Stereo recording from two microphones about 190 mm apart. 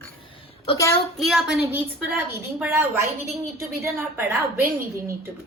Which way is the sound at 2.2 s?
15° right (ahead or behind).